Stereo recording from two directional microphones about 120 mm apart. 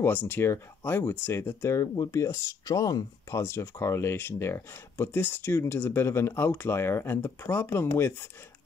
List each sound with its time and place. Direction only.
0.0 s speech: 15° left (ahead or behind)